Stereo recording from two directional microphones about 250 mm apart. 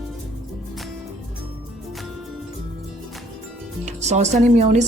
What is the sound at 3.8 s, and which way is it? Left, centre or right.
Music, right.